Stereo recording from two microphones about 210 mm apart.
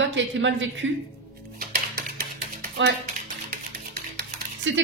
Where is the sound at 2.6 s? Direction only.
50° right (ahead or behind).